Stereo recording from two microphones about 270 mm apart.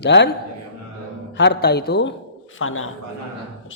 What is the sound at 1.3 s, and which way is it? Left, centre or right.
A man's voice, left.